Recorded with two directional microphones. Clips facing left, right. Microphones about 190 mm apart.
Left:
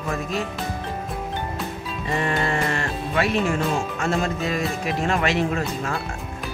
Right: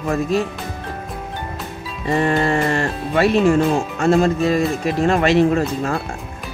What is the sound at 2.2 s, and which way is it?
Speech, 35° right (ahead or behind).